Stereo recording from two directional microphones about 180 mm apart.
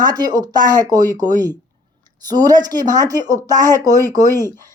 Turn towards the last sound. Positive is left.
turn(degrees=-20)  # may be behind; listen again after turning